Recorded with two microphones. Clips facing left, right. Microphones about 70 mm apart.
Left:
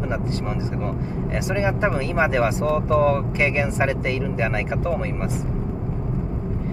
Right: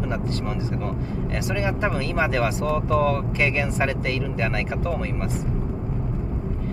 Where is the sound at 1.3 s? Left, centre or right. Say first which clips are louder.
Left 3 dB; centre.